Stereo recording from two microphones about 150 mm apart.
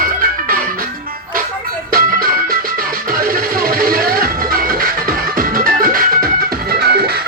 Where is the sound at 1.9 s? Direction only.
80° right.